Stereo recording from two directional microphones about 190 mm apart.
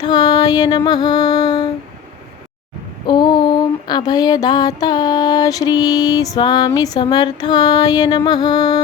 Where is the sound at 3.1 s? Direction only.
25° left (ahead or behind).